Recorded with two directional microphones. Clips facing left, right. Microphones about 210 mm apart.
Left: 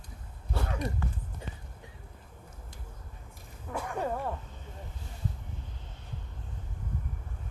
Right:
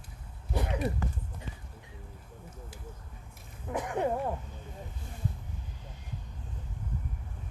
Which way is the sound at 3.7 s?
20° right (ahead or behind).